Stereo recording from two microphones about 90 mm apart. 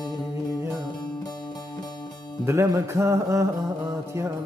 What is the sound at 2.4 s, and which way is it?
Music, 30° right (ahead or behind).